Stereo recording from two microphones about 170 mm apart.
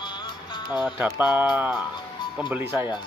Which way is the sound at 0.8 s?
10° right (ahead or behind).